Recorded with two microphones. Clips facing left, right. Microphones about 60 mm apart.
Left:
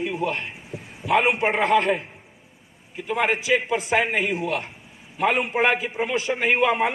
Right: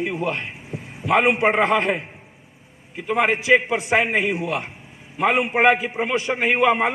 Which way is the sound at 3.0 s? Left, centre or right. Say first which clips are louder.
Right 4 dB; right.